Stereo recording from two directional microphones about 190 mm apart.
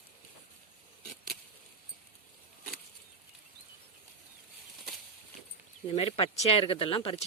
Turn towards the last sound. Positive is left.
turn(degrees=30)  # may be behind; listen again after turning